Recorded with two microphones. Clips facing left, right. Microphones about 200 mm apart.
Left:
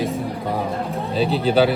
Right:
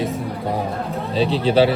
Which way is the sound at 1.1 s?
30° right (ahead or behind).